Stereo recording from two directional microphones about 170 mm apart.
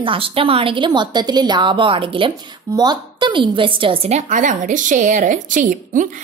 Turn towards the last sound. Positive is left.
turn(degrees=-50)  # may be behind; listen again after turning